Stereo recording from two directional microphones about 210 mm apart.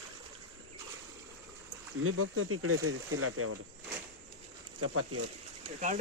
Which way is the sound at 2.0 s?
85° right.